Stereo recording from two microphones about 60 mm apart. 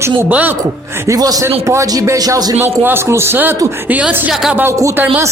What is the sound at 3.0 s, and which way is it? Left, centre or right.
Speech, right.